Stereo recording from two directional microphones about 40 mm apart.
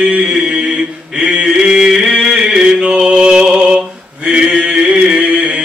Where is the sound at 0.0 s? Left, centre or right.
Right.